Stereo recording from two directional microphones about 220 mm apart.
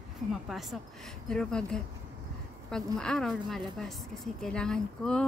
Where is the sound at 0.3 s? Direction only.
Centre (ahead or behind).